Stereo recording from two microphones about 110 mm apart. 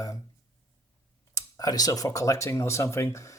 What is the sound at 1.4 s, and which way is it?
Speech, 35° left (ahead or behind).